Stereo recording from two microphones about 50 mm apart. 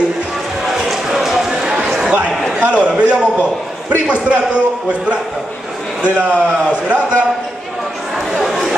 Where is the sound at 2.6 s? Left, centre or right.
Right.